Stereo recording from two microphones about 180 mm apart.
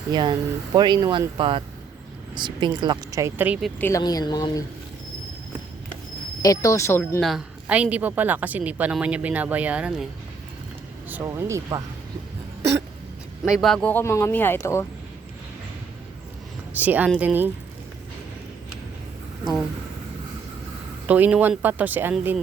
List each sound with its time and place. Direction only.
0.1 s a woman's voice: 25° right (ahead or behind); by 3.7 s 10° right (ahead or behind)
3.8 s a woman's voice: 15° left (ahead or behind)
6.4 s speech: 20° left (ahead or behind)
7.2 s a woman's voice: centre (ahead or behind)
11.1 s a woman's voice: 15° right (ahead or behind)
13.4 s speech: centre (ahead or behind); by 14.8 s 15° left (ahead or behind)
16.7 s a woman's voice: 10° right (ahead or behind)
21.1 s a woman's voice: 5° right (ahead or behind)